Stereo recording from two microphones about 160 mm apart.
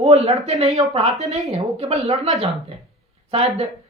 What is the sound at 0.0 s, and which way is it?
Speech, 40° right (ahead or behind).